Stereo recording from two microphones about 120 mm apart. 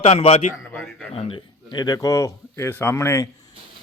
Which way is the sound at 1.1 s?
40° left (ahead or behind).